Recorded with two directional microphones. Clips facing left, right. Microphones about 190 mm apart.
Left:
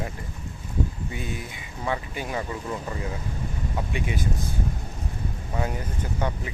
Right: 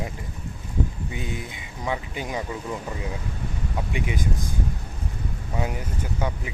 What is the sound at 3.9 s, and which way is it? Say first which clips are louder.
Speech: right 2 dB; 15° right (ahead or behind).